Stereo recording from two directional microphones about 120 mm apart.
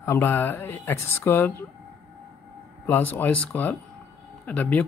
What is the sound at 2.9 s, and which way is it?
Speech, 15° left (ahead or behind).